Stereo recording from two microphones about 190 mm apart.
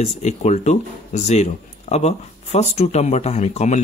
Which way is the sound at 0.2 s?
35° left (ahead or behind).